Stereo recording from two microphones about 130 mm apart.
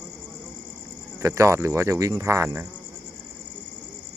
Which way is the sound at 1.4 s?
20° right (ahead or behind).